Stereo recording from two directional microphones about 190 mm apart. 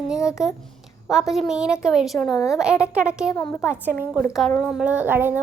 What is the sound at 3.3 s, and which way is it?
Speech, 20° left (ahead or behind).